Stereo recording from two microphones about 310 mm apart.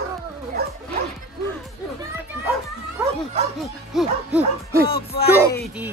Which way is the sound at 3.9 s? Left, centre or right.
Centre.